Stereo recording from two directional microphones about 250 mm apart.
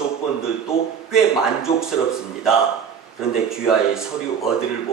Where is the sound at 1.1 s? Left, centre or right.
Centre.